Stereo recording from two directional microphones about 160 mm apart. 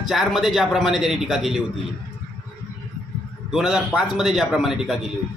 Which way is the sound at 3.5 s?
5° right (ahead or behind).